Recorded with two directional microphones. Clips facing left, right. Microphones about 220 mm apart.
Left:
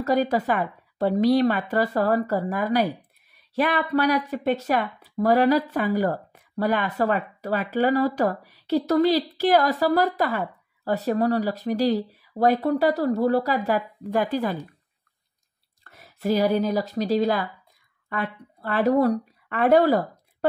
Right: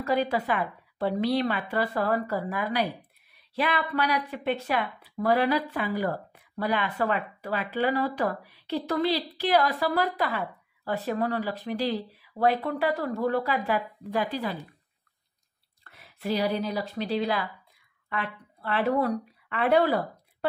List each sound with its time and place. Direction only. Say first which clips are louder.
0.0 s speech: left 4 dB; 40° left (ahead or behind)
15.9 s speech: left 6 dB; 40° left (ahead or behind)